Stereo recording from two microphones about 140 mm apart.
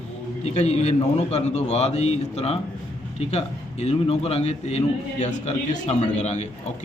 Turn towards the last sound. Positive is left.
turn(degrees=55)  # may be behind; listen again after turning